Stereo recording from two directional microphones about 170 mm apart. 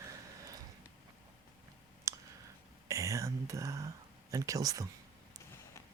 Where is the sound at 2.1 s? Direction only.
20° right (ahead or behind).